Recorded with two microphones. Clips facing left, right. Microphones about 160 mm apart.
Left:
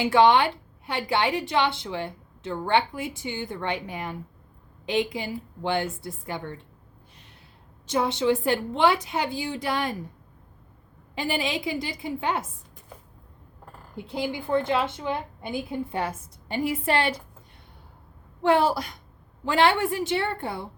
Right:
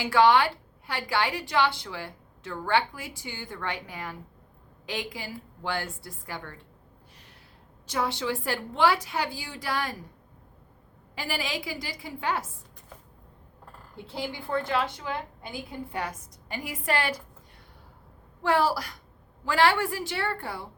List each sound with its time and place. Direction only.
0.0 s a woman's voice: 20° left (ahead or behind)
7.9 s a woman's voice: 20° left (ahead or behind)
11.1 s a woman's voice: 20° left (ahead or behind)
13.9 s a woman's voice: 15° left (ahead or behind)
18.4 s a woman's voice: 20° left (ahead or behind)